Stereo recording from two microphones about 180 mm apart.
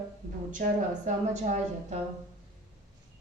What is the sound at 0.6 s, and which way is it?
Speech, 45° right (ahead or behind).